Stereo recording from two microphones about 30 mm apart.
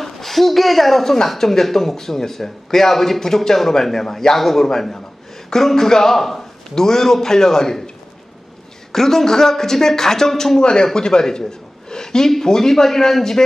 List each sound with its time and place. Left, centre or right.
0.0 s speech: centre
8.9 s speech: centre
11.9 s a sound: left
12.3 s speech: centre